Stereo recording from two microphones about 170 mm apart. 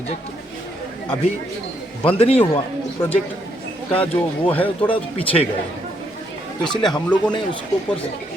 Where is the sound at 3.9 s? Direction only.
30° left (ahead or behind).